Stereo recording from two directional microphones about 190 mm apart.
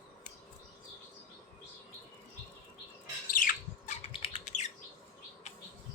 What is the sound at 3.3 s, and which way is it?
Squawk, 45° left (ahead or behind).